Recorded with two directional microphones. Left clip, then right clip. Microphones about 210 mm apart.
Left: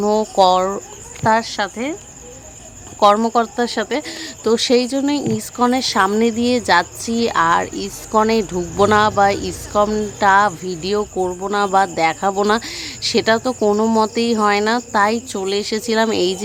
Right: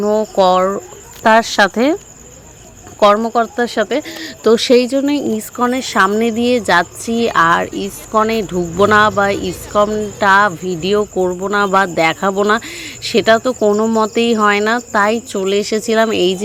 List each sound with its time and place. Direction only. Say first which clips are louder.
0.0 s speech: right 1 dB; 5° right (ahead or behind)
1.2 s speech: right 6 dB; 20° right (ahead or behind)
3.2 s speech: right 2 dB; centre (ahead or behind)